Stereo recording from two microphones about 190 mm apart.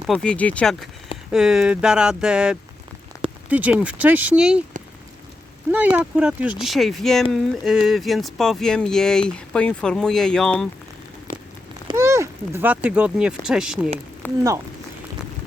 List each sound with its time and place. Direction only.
0.1 s speech: 5° left (ahead or behind)
5.7 s speech: 10° right (ahead or behind)
11.9 s a sound: 15° right (ahead or behind)
13.4 s speech: 5° right (ahead or behind)
14.2 s speech: 10° left (ahead or behind)